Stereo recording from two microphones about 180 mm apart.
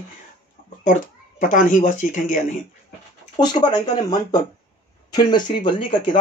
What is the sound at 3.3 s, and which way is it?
Speech, 25° left (ahead or behind).